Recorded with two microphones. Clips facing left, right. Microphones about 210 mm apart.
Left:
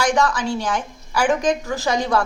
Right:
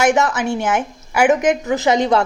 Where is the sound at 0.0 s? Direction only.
20° right (ahead or behind).